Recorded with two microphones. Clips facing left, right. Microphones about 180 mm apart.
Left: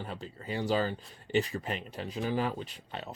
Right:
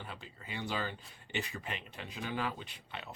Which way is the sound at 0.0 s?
40° left (ahead or behind).